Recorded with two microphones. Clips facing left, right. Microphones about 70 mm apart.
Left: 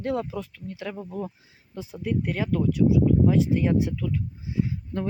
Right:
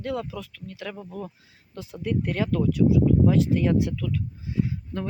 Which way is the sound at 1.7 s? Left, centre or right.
Centre.